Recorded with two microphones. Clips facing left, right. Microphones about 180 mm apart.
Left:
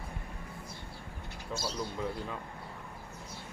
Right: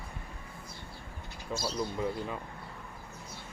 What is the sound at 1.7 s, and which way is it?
Speech, 5° right (ahead or behind).